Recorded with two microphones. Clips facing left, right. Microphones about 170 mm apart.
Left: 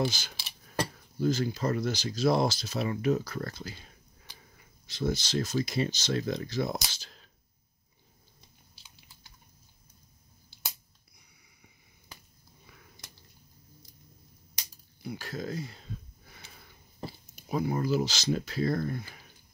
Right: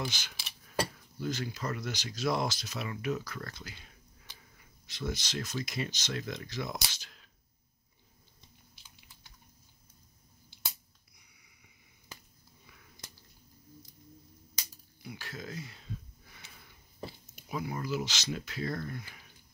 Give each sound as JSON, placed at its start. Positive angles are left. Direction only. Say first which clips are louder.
{"t": 0.0, "sound": "speech", "louder": "left 8 dB", "side_deg": 35}
{"t": 8.8, "sound": "chewing", "louder": "left 4 dB", "side_deg": 30}
{"t": 15.0, "sound": "speech", "louder": "left 7 dB", "side_deg": 40}
{"t": 16.3, "sound": "a sound", "louder": "left 3 dB", "side_deg": 35}
{"t": 17.0, "sound": "speech", "louder": "left 2 dB", "side_deg": 35}